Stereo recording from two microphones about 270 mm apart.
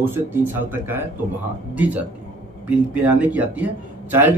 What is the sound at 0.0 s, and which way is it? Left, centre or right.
Speech, centre.